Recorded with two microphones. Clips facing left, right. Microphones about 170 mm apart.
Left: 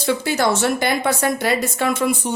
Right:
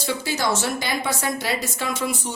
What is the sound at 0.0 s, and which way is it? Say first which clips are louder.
Speech: left 6 dB; 60° left (ahead or behind).